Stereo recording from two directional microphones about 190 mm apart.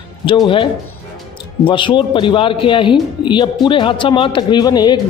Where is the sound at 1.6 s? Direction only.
25° left (ahead or behind).